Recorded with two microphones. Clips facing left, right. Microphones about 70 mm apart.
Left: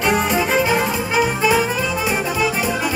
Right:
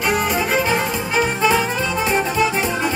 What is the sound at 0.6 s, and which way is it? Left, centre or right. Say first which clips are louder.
Music: left 1 dB; centre.